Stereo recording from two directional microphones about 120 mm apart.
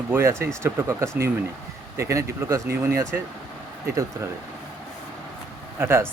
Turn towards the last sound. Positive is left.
turn(degrees=-20)  # may be behind; listen again after turning